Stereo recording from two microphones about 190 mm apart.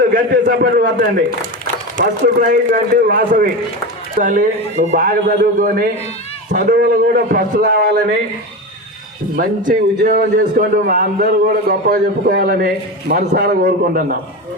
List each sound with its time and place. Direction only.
0.1 s a man's voice: 50° right (ahead or behind)
2.0 s a man's voice: 45° right (ahead or behind)
9.3 s a man's voice: 50° right (ahead or behind)